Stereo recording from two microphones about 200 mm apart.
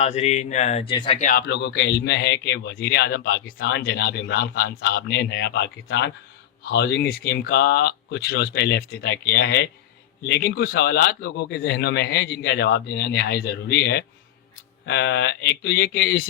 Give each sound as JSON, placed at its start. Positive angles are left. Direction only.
{"t": 0.0, "sound": "speech", "side_deg": 35}
{"t": 1.2, "sound": "speech", "side_deg": 45}